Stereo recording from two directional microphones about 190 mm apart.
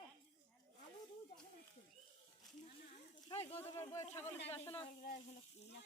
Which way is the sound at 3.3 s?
25° left (ahead or behind).